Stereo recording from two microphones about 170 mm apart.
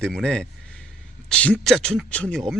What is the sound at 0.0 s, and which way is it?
Speech, 5° left (ahead or behind).